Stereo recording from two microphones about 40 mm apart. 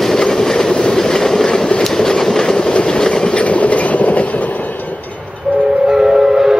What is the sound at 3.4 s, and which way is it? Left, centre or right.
Train, left.